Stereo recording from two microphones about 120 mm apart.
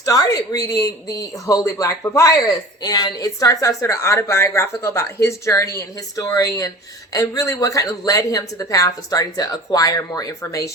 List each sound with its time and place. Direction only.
0.0 s speech: 30° left (ahead or behind)